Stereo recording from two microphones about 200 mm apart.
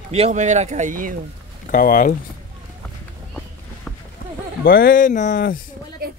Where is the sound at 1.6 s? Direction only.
45° left (ahead or behind).